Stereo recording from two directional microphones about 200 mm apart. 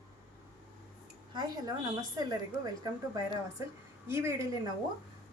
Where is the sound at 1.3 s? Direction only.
20° right (ahead or behind).